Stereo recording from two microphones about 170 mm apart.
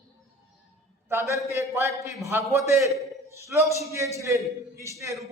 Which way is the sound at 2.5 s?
15° right (ahead or behind).